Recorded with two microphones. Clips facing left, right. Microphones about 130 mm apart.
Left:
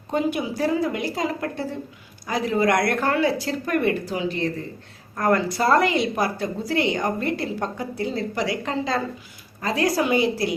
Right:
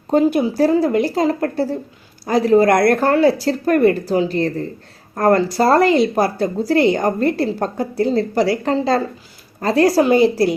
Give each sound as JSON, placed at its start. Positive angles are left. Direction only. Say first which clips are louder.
{"t": 0.1, "sound": "a woman's voice", "louder": "right 9 dB", "side_deg": -35}